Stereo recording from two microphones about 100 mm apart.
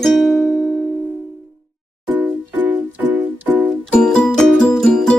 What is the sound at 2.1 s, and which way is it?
Music, 15° right (ahead or behind).